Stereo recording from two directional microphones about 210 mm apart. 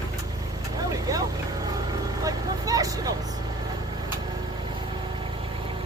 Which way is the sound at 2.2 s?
15° right (ahead or behind).